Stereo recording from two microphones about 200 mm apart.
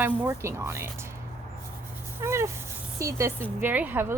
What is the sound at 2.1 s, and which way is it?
Cat, 15° right (ahead or behind).